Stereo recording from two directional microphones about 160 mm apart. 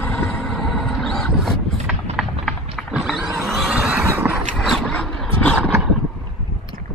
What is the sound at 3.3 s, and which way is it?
Vehicle, centre (ahead or behind).